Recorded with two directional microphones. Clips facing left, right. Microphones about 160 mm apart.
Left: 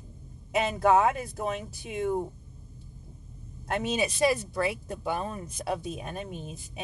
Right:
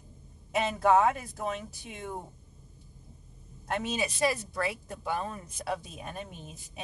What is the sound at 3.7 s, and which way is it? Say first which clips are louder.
Speech: left 3 dB; 15° left (ahead or behind).